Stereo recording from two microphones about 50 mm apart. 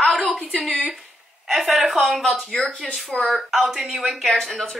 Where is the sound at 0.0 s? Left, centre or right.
Centre.